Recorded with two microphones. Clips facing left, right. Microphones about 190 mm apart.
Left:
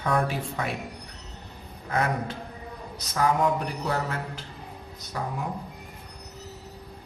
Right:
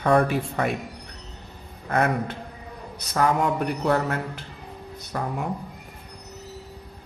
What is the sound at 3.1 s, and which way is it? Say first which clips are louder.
Speech: right 2 dB; 60° right (ahead or behind).